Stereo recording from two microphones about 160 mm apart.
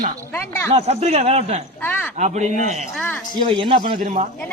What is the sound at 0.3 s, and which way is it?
Speech, 15° left (ahead or behind).